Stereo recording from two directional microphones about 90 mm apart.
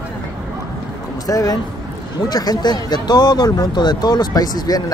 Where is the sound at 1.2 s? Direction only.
40° left (ahead or behind).